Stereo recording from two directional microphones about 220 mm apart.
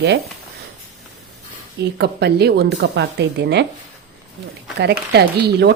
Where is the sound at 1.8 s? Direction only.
50° right (ahead or behind).